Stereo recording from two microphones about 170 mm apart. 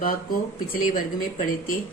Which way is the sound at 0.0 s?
55° left (ahead or behind).